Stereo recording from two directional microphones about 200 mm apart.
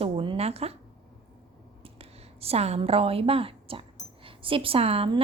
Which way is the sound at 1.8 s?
30° right (ahead or behind).